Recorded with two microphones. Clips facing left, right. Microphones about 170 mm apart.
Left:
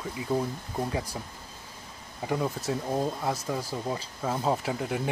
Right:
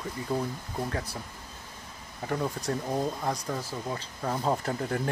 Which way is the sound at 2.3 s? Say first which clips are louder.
Left 1 dB; 5° left (ahead or behind).